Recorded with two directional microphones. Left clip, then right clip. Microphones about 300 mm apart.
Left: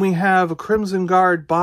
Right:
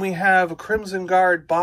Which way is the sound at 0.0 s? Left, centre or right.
Centre.